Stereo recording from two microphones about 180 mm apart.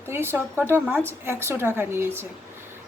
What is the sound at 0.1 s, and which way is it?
A woman's voice, 15° right (ahead or behind).